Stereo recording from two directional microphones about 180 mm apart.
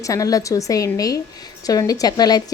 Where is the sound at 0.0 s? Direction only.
20° left (ahead or behind).